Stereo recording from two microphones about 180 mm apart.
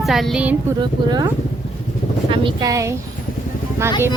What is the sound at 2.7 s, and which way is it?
Speech, 15° right (ahead or behind).